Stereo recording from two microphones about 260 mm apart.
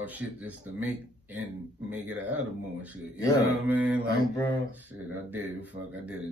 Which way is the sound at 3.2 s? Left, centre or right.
Centre.